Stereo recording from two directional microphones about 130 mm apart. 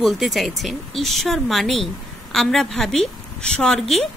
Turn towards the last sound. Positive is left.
turn(degrees=5)  # may be behind; listen again after turning